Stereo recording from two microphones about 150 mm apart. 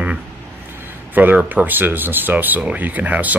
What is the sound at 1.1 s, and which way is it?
Speech, 10° right (ahead or behind).